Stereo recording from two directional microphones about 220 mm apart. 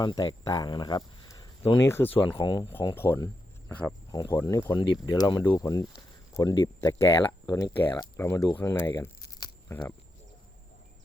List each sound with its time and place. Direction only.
0.0 s speech: 20° left (ahead or behind)